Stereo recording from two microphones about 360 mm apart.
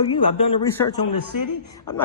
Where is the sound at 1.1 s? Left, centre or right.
Left.